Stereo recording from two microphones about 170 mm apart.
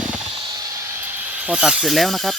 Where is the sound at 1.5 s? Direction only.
5° right (ahead or behind).